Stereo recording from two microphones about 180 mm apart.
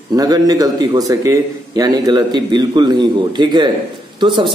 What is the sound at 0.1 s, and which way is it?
A man's voice, 20° right (ahead or behind).